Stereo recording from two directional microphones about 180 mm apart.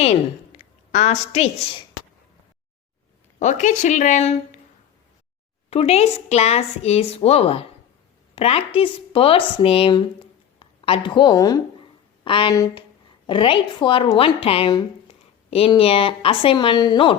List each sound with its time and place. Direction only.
0.0 s a woman's voice: 35° left (ahead or behind)
3.3 s speech: 45° left (ahead or behind)
5.7 s a woman's voice: 35° left (ahead or behind)